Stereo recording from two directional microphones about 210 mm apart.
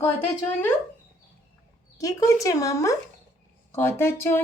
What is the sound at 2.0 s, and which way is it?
Speech, 15° left (ahead or behind).